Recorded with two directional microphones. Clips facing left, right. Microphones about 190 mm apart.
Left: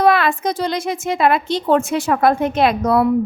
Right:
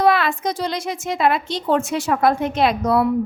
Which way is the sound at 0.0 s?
55° left (ahead or behind).